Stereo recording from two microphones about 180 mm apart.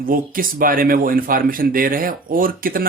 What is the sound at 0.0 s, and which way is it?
Speech, 50° right (ahead or behind).